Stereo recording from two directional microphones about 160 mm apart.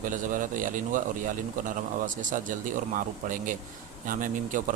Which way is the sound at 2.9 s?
55° right (ahead or behind).